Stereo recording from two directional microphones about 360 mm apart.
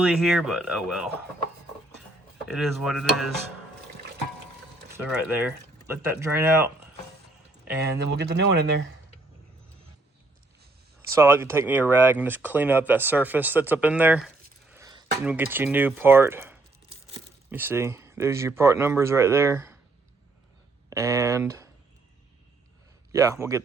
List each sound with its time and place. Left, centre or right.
0.0 s speech: centre
2.5 s speech: centre
4.9 s speech: centre
8.2 s speech: right
11.1 s speech: centre
20.9 s speech: centre
23.1 s speech: centre